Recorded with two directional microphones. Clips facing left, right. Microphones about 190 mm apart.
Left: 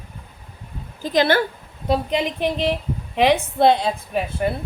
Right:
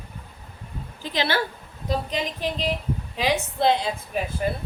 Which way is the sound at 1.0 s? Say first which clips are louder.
Left 8 dB; 50° left (ahead or behind).